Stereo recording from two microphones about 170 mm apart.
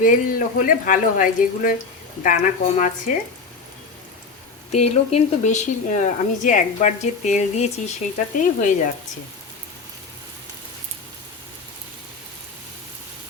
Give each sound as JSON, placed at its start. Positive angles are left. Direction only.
{"t": 0.0, "sound": "speech", "side_deg": 55}
{"t": 4.7, "sound": "speech", "side_deg": 40}